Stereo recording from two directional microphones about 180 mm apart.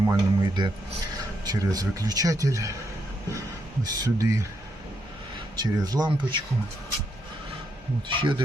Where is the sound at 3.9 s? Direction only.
20° right (ahead or behind).